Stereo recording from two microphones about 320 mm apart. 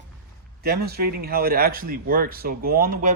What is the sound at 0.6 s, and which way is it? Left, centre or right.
Speech, right.